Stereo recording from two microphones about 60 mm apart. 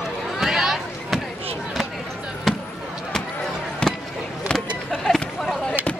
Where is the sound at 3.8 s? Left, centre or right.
Centre.